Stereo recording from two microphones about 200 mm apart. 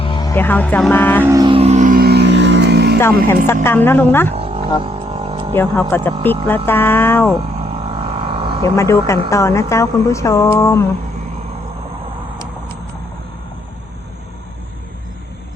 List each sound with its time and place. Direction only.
0.0 s speech: 20° left (ahead or behind)
1.2 s music: 15° right (ahead or behind); by 3.0 s 55° right (ahead or behind)
3.2 s speech: 10° left (ahead or behind)
4.4 s wild animals: 30° right (ahead or behind)
4.8 s a sound: 25° right (ahead or behind)
5.5 s speech: 10° left (ahead or behind)
7.9 s a sound: 25° right (ahead or behind)
8.6 s speech: 15° left (ahead or behind)